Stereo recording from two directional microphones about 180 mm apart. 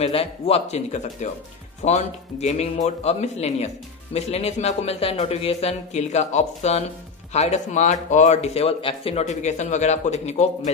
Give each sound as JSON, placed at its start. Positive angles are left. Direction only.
{"t": 0.0, "sound": "speech", "side_deg": 30}